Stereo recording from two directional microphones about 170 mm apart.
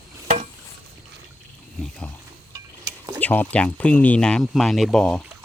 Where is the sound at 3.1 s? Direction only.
10° left (ahead or behind).